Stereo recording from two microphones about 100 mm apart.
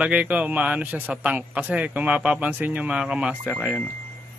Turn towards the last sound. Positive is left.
turn(degrees=-10)  # may be behind; listen again after turning